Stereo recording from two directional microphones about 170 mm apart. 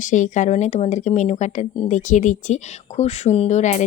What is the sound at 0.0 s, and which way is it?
Speech, 45° left (ahead or behind).